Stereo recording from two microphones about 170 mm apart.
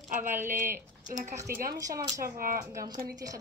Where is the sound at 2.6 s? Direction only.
15° right (ahead or behind).